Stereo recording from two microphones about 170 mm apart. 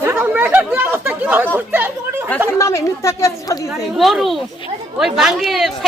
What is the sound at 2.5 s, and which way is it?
A woman's voice, 15° left (ahead or behind).